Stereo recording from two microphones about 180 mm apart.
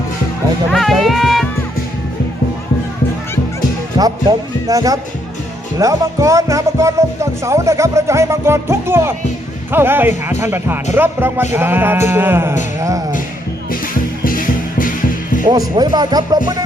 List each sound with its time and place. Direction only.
0.7 s music: centre (ahead or behind)
3.9 s speech: 20° right (ahead or behind)
14.3 s music: 50° left (ahead or behind)
15.4 s speech: 25° right (ahead or behind)